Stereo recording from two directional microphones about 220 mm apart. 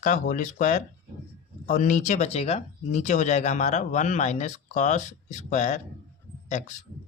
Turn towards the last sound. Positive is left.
turn(degrees=30)  # may be behind; listen again after turning